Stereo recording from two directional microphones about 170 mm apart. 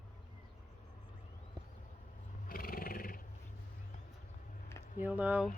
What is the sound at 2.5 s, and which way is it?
Roar, 55° left (ahead or behind).